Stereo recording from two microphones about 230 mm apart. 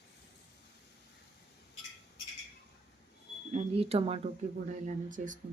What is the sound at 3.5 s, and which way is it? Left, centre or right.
Speech, right.